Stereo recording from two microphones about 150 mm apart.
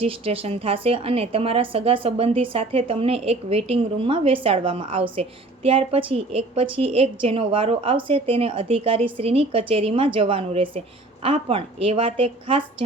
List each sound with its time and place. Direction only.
0.0 s a woman's voice: 40° right (ahead or behind)